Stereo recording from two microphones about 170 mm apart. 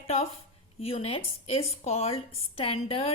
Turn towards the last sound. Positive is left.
turn(degrees=35)  # may be behind; listen again after turning